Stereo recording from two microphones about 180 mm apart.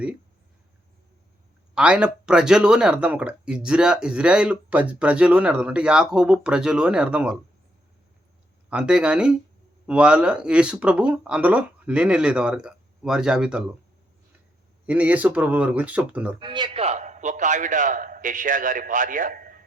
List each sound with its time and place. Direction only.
1.7 s speech: 5° right (ahead or behind)
8.7 s speech: 5° right (ahead or behind)
14.8 s speech: 10° right (ahead or behind)
16.4 s a man's voice: 25° right (ahead or behind); by 19.6 s 50° right (ahead or behind)